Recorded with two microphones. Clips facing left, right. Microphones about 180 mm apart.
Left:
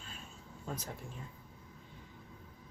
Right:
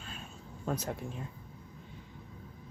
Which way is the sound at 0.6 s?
75° right (ahead or behind).